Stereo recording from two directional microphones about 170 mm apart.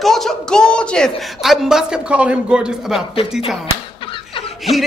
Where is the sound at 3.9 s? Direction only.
30° left (ahead or behind).